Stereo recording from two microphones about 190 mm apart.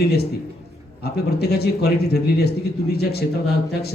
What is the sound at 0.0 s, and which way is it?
A man's voice, 60° left (ahead or behind).